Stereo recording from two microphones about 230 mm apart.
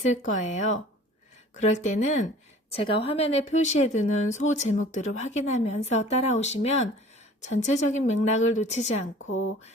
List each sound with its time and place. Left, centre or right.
0.1 s a woman's voice: left